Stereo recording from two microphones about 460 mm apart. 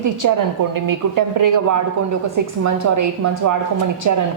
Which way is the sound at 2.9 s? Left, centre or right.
Right.